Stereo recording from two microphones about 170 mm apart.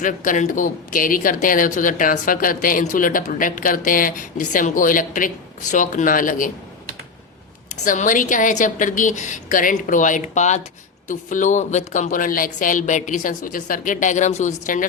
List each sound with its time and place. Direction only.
0.0 s speech: 50° left (ahead or behind)
7.9 s speech: 50° left (ahead or behind)